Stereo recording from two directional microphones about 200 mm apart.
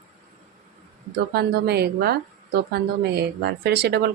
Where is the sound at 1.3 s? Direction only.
55° right (ahead or behind).